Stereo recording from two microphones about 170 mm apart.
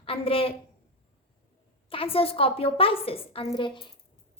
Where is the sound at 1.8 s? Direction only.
35° left (ahead or behind).